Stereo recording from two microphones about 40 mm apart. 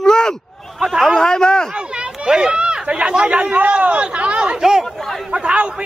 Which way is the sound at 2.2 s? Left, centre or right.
Right.